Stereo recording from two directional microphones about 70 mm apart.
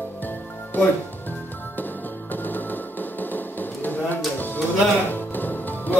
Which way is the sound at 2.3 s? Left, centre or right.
Left.